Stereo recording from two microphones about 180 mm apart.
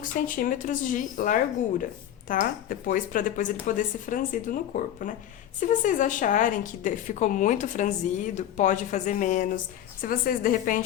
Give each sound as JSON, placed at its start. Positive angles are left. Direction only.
{"t": 0.0, "sound": "speech", "side_deg": 50}